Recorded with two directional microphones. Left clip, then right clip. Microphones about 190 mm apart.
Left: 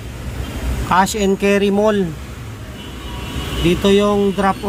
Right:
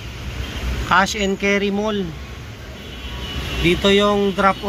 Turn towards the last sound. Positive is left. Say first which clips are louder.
# even
turn(degrees=5)  # may be behind; listen again after turning